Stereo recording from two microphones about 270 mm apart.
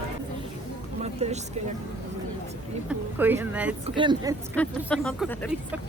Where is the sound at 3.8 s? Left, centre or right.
Centre.